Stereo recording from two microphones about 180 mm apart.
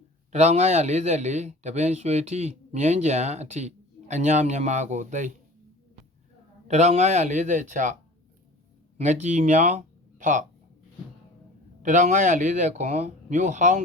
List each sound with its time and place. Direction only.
0.3 s speech: 40° right (ahead or behind)
6.7 s speech: 40° right (ahead or behind)
9.0 s speech: 40° right (ahead or behind)
11.8 s speech: 45° right (ahead or behind)